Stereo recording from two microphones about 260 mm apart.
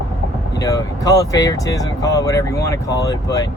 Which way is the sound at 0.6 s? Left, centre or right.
Centre.